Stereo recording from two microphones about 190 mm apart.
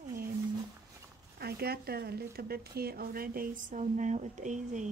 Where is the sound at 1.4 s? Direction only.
55° right (ahead or behind).